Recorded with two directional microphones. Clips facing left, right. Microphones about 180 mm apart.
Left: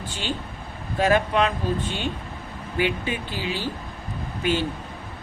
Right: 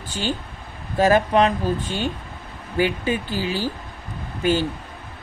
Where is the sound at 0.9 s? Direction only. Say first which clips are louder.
Right 4 dB; 40° right (ahead or behind).